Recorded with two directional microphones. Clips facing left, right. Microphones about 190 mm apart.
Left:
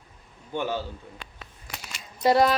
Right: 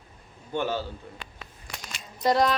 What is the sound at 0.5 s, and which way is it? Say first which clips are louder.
Speech: right 1 dB; 15° left (ahead or behind).